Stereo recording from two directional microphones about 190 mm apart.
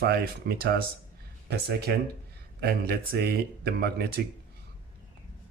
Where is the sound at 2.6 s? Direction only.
55° right (ahead or behind).